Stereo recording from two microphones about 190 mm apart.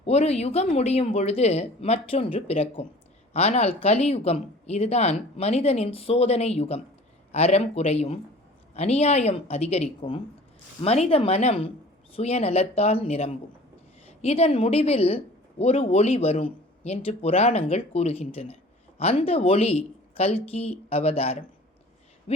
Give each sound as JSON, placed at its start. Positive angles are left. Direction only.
{"t": 0.0, "sound": "a woman's voice", "side_deg": 35}